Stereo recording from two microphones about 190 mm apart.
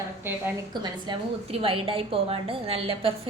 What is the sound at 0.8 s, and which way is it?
A woman's voice, 25° right (ahead or behind).